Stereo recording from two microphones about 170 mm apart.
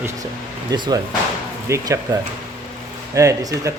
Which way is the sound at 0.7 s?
25° right (ahead or behind).